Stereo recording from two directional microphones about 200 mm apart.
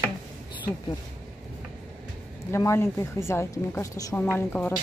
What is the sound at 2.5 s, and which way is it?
Speech, 15° left (ahead or behind).